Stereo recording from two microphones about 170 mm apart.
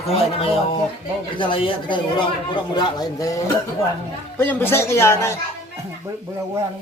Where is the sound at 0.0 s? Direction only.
35° left (ahead or behind); by 5.4 s 15° left (ahead or behind).